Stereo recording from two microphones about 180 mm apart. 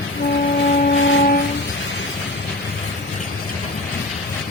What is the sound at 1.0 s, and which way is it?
Music, 90° left.